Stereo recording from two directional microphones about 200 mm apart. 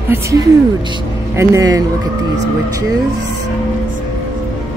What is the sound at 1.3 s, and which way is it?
Speech, 15° right (ahead or behind).